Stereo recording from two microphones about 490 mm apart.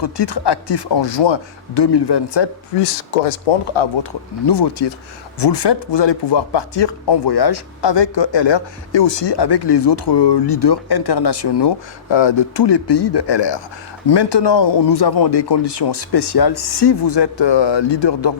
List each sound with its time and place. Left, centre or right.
0.0 s speech: left
3.8 s speech: left
4.4 s speech: left